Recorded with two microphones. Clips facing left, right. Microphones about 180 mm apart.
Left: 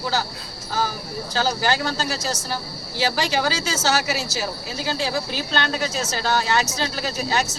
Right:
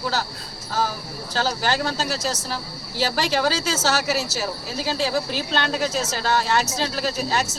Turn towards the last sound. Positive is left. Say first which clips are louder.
# even
turn(degrees=0)  # may be behind; listen again after turning